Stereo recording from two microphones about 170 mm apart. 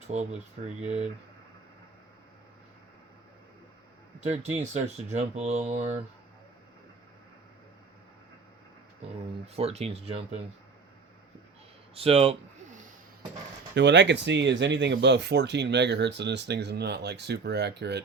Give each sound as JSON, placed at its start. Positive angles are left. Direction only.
{"t": 0.1, "sound": "speech", "side_deg": -40}
{"t": 4.2, "sound": "speech", "side_deg": -40}
{"t": 9.6, "sound": "speech", "side_deg": -35}
{"t": 11.9, "sound": "a sound", "side_deg": -35}
{"t": 13.7, "sound": "speech", "side_deg": -90}